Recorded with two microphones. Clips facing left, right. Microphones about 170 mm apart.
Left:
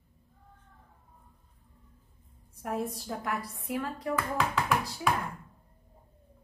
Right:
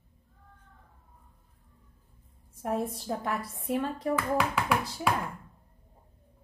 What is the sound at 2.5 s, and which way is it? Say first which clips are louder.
Speech: right 2 dB; 25° right (ahead or behind).